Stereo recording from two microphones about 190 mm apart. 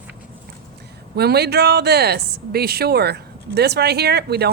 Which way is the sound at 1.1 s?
60° right (ahead or behind).